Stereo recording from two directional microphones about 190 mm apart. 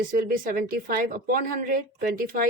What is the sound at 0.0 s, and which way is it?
A woman's voice, 45° right (ahead or behind).